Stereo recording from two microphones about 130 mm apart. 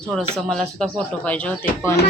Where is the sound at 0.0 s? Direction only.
Centre (ahead or behind).